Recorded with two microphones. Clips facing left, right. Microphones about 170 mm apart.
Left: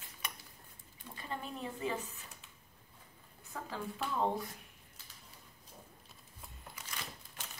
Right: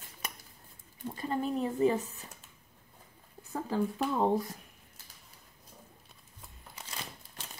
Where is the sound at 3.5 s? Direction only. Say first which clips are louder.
Right 10 dB; 40° right (ahead or behind).